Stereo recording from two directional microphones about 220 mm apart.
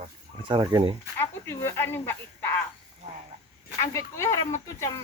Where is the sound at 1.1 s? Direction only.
10° left (ahead or behind).